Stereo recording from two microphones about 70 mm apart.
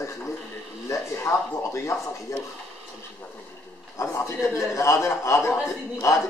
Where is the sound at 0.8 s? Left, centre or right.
Left.